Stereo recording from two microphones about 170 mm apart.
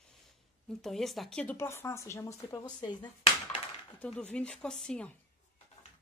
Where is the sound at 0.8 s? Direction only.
Centre (ahead or behind); by 3.1 s 25° left (ahead or behind).